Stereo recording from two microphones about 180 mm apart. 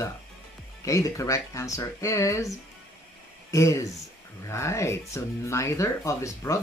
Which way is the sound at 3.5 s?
15° left (ahead or behind).